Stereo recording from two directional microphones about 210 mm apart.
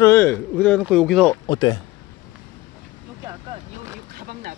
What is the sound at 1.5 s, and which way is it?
Speech, 20° left (ahead or behind).